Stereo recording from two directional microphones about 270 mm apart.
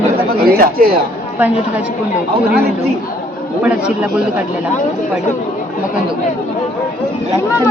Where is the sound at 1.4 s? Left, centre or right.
Centre.